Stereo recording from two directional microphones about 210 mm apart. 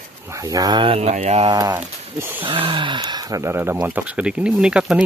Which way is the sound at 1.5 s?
15° right (ahead or behind).